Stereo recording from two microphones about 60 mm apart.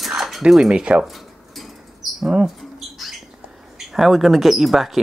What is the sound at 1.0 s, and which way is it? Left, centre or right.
Mouse, centre.